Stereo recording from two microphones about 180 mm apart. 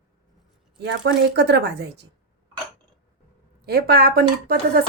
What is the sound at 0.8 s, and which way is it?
A woman's voice, 70° right (ahead or behind).